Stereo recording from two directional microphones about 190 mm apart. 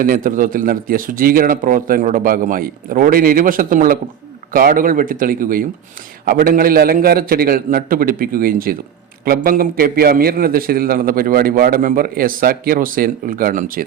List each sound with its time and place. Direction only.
0.0 s a man's voice: 45° right (ahead or behind)